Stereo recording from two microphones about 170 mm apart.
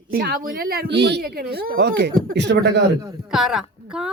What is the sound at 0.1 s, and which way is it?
Speech, 65° right (ahead or behind).